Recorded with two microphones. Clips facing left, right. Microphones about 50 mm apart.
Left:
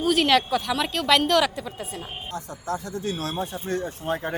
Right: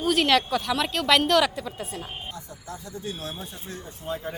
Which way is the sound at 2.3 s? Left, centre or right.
Left.